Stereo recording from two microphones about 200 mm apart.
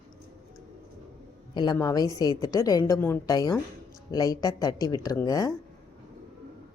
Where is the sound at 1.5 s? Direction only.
20° left (ahead or behind).